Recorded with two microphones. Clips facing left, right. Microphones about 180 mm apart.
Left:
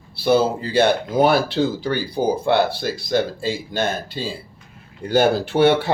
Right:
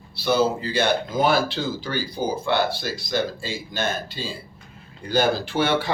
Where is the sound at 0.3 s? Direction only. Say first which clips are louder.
Left 3 dB; 55° left (ahead or behind).